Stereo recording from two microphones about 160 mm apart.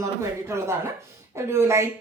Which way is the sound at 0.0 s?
20° right (ahead or behind).